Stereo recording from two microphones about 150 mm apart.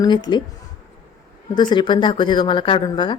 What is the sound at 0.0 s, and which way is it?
Speech, 30° left (ahead or behind).